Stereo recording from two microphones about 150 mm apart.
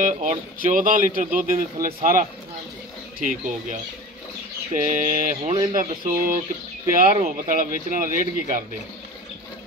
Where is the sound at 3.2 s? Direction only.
60° right (ahead or behind).